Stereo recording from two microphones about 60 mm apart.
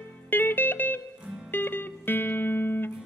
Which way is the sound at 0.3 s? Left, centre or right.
Left.